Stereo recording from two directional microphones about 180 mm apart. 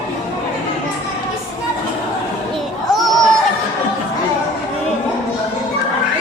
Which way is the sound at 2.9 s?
Centre (ahead or behind).